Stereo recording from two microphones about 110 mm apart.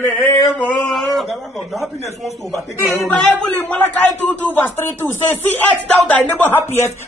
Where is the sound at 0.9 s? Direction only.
Centre (ahead or behind).